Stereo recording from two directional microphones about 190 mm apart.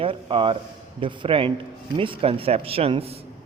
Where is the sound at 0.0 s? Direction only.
25° right (ahead or behind).